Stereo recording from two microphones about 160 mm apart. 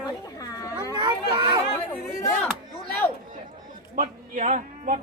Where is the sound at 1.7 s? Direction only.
15° left (ahead or behind).